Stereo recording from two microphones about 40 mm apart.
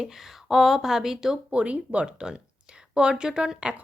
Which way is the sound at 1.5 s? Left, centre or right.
Right.